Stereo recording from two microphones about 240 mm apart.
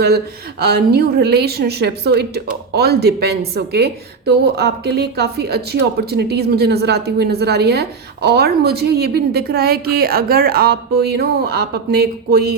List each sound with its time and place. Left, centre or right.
0.6 s a woman's voice: right